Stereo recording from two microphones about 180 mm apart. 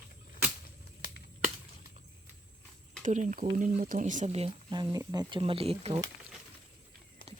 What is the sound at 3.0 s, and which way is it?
Speech, 45° right (ahead or behind).